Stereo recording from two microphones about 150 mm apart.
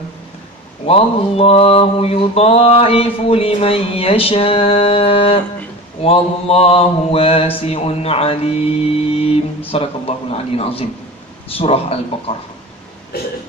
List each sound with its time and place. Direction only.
0.8 s mantra: 40° left (ahead or behind)